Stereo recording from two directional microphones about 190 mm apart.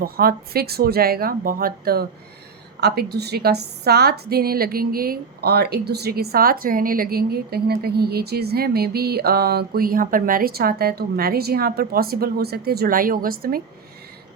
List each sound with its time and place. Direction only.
0.0 s a woman's voice: 50° right (ahead or behind)